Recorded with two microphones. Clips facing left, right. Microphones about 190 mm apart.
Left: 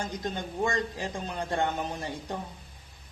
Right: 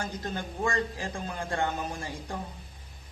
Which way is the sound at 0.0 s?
15° left (ahead or behind).